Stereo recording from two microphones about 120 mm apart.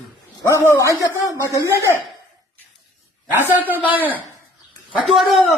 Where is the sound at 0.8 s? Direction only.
25° left (ahead or behind).